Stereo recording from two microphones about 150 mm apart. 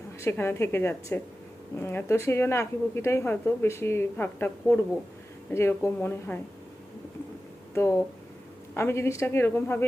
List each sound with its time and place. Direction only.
0.2 s a woman's voice: 15° left (ahead or behind)
7.7 s a woman's voice: 15° left (ahead or behind)